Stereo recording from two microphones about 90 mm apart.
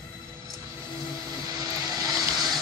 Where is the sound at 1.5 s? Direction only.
45° right (ahead or behind).